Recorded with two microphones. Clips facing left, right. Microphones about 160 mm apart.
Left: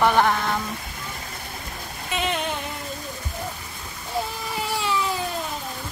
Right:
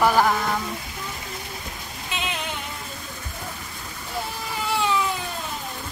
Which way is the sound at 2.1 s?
50° left (ahead or behind).